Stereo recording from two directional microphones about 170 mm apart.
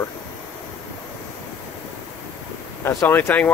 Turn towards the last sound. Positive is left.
turn(degrees=10)  # may be behind; listen again after turning